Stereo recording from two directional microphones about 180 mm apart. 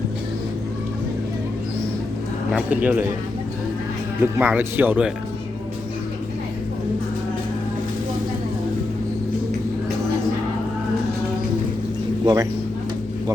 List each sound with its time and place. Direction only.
2.5 s speech: 5° right (ahead or behind)
4.2 s speech: 10° right (ahead or behind)
12.2 s speech: 20° right (ahead or behind)